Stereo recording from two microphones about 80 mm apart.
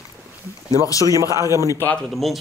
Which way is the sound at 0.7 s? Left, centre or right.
Left.